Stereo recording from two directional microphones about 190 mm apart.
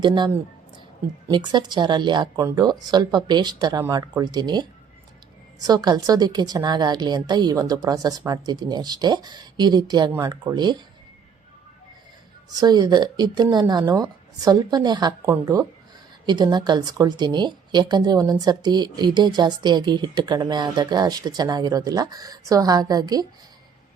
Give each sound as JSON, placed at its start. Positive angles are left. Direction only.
{"t": 0.0, "sound": "a woman's voice", "side_deg": -25}
{"t": 1.3, "sound": "a woman's voice", "side_deg": -25}
{"t": 12.5, "sound": "a woman's voice", "side_deg": -20}